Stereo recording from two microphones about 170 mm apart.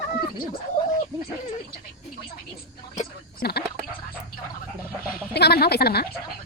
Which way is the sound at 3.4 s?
70° left (ahead or behind).